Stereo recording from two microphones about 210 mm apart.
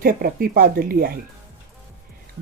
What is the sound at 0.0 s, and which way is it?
Speech, 45° right (ahead or behind).